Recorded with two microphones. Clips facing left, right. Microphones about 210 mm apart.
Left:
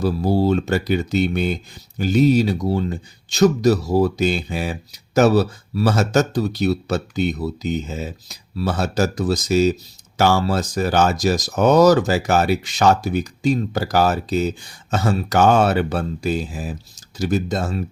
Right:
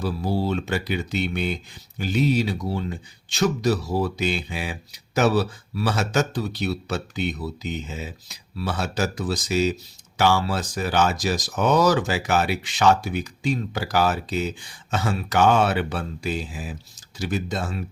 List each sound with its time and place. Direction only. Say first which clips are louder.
0.0 s speech: left 7 dB; 40° left (ahead or behind)